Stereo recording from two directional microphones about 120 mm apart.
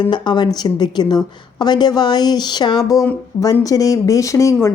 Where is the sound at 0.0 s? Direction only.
40° left (ahead or behind).